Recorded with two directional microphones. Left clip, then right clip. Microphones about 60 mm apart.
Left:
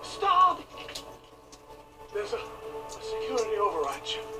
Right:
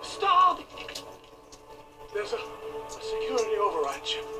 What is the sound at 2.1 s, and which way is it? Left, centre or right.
Music, right.